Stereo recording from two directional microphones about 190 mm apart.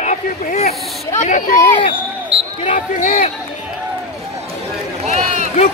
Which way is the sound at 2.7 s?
45° left (ahead or behind).